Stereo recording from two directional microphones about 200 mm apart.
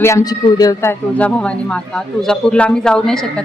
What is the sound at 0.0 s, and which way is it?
A man's voice, 15° left (ahead or behind).